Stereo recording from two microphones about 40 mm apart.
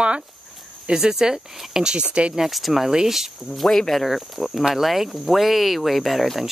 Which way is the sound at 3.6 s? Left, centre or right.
Centre.